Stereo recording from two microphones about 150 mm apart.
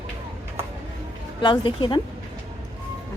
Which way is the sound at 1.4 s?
30° left (ahead or behind).